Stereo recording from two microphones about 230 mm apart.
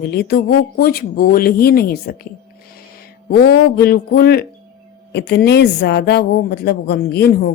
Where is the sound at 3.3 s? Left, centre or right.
Left.